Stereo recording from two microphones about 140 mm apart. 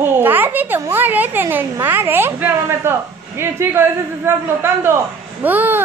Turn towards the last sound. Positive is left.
turn(degrees=-10)  # may be behind; listen again after turning